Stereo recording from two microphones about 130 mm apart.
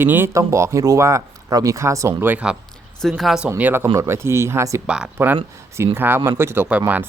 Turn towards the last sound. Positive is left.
turn(degrees=-15)  # may be behind; listen again after turning